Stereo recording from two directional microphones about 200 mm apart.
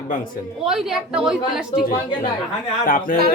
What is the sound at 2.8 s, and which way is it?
Speech, 45° left (ahead or behind).